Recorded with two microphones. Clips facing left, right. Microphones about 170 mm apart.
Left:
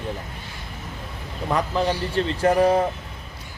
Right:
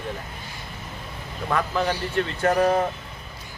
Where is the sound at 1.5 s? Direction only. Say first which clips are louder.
Left 2 dB; 35° left (ahead or behind).